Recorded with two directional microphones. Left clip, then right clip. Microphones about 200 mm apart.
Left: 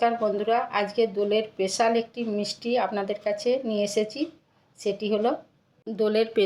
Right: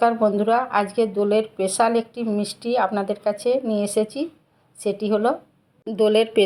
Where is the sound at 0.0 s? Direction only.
20° right (ahead or behind).